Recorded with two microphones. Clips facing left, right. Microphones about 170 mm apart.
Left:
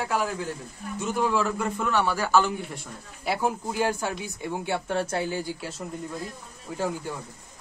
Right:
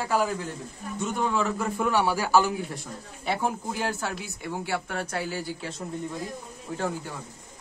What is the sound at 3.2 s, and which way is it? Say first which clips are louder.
Speech: left 1 dB; 5° left (ahead or behind).